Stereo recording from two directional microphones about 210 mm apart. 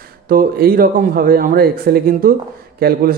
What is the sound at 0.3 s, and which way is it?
A man's voice, 45° right (ahead or behind).